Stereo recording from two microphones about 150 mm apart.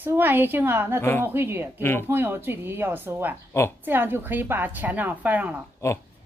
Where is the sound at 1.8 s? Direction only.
15° left (ahead or behind).